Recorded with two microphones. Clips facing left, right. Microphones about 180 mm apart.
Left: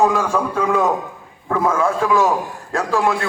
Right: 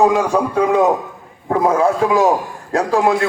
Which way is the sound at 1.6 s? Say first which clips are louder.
Right 4 dB; 35° right (ahead or behind).